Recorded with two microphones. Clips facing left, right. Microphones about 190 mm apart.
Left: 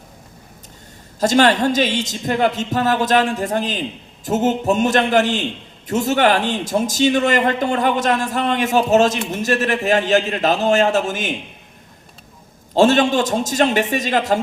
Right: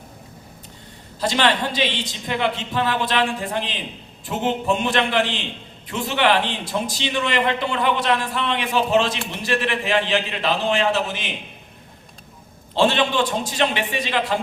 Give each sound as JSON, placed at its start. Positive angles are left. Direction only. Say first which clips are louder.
{"t": 1.2, "sound": "a man's voice", "louder": "left 6 dB", "side_deg": 45}
{"t": 12.7, "sound": "a man's voice", "louder": "left 5 dB", "side_deg": 45}